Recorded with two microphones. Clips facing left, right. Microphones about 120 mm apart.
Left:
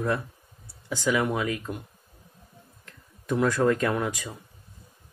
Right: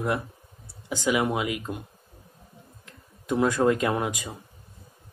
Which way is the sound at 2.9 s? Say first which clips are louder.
Right 1 dB; 20° right (ahead or behind).